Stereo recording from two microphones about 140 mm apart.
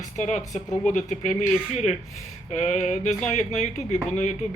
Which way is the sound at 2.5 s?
55° left (ahead or behind).